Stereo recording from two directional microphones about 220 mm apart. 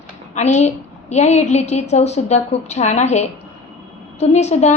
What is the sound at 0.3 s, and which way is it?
A woman's voice, 30° left (ahead or behind).